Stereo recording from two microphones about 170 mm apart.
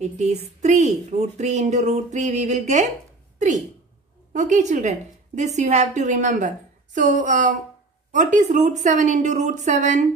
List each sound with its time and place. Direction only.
0.0 s a woman's voice: 40° right (ahead or behind)